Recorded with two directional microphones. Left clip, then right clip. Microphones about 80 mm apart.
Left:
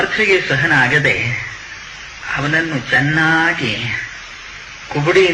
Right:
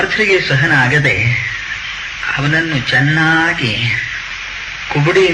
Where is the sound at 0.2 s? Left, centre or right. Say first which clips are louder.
Even; left.